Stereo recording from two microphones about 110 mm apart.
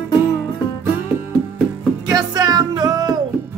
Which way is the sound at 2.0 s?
35° right (ahead or behind).